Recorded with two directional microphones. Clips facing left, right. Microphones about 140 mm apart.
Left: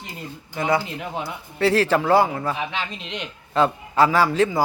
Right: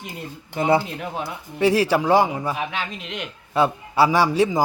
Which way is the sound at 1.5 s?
15° right (ahead or behind).